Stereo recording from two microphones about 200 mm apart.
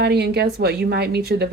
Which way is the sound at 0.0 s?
55° right (ahead or behind).